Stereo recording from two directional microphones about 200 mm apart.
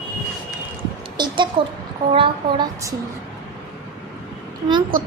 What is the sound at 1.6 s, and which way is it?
A woman's voice, 25° right (ahead or behind).